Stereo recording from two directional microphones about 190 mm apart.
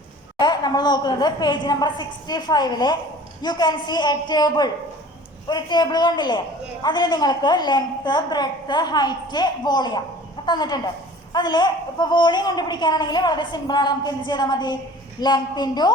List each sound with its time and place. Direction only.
0.3 s a woman's voice: 20° left (ahead or behind)